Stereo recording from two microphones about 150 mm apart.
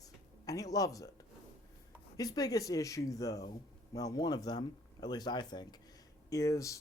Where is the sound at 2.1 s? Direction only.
25° left (ahead or behind).